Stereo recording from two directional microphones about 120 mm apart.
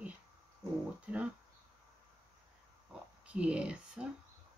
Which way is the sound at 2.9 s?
10° right (ahead or behind).